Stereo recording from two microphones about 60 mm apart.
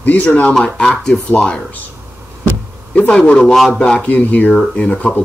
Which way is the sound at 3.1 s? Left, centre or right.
Centre.